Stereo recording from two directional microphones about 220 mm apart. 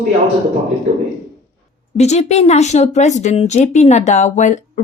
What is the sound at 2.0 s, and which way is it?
A woman's voice, 30° left (ahead or behind).